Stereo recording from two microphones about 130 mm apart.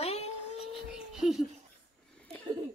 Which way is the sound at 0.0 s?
55° left (ahead or behind).